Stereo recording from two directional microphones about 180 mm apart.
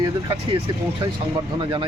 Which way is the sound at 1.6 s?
25° right (ahead or behind).